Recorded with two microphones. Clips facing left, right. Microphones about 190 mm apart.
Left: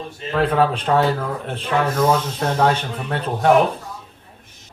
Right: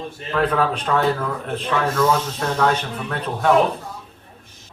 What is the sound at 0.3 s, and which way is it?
A man's voice, 30° left (ahead or behind).